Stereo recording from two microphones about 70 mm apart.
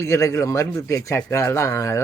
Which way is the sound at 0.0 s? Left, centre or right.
Left.